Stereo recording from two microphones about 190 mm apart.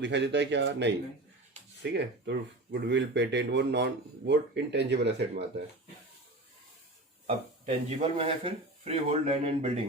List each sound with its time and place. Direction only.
0.0 s speech: 65° right (ahead or behind)
7.3 s speech: 35° right (ahead or behind)